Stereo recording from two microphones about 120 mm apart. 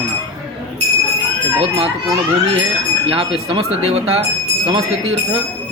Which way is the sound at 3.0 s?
45° right (ahead or behind).